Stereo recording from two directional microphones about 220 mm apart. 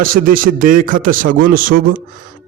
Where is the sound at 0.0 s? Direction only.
40° right (ahead or behind).